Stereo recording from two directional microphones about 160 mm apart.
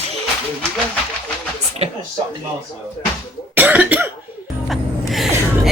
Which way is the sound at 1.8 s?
40° right (ahead or behind).